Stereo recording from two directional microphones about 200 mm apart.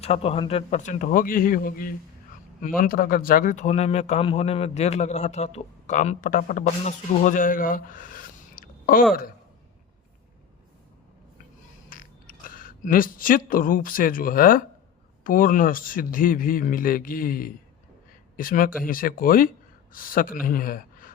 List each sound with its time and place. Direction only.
0.0 s speech: 30° left (ahead or behind)
11.9 s a man's voice: 45° left (ahead or behind)